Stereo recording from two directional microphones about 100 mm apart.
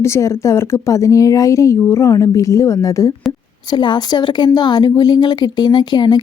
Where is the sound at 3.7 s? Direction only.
45° left (ahead or behind).